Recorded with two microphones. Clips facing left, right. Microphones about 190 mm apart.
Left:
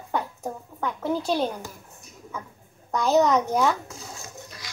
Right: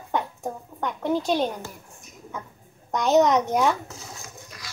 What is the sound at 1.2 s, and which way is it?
Speech, 15° right (ahead or behind).